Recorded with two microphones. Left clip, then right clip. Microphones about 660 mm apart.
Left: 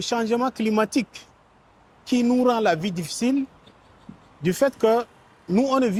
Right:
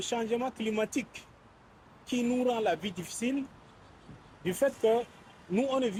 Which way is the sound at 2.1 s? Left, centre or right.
Left.